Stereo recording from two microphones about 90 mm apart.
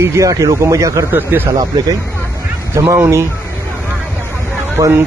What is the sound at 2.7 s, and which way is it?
Speech, 30° right (ahead or behind).